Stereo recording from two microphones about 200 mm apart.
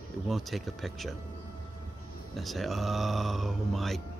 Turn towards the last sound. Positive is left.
turn(degrees=0)  # may be behind; listen again after turning